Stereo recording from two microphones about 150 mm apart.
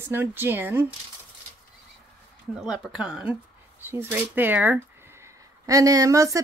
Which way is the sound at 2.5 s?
5° right (ahead or behind).